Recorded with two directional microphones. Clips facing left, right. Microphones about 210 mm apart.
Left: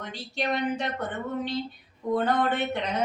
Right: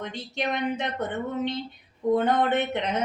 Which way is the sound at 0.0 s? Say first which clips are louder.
Right 1 dB; 20° right (ahead or behind).